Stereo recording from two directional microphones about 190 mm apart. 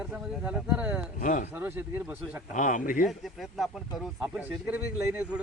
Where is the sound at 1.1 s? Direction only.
45° left (ahead or behind).